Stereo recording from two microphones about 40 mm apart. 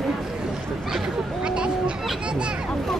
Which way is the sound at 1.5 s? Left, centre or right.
Right.